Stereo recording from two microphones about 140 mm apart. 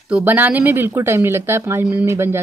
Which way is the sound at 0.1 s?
10° right (ahead or behind).